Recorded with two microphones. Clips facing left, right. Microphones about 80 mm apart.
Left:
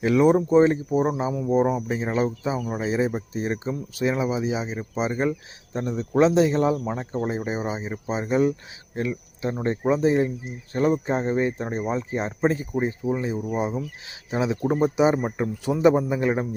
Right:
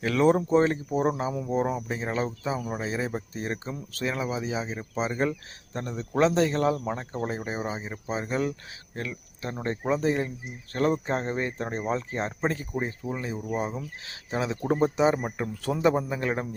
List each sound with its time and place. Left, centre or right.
0.0 s speech: centre